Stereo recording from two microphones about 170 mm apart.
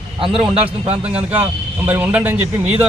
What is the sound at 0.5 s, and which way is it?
Speech, 35° right (ahead or behind).